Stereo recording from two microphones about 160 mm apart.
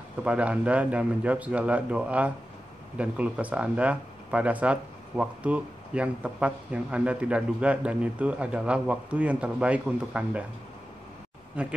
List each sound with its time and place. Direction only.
0.2 s speech: 5° right (ahead or behind)
11.6 s speech: 5° right (ahead or behind)